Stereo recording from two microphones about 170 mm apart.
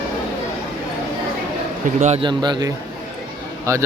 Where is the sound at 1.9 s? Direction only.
45° right (ahead or behind).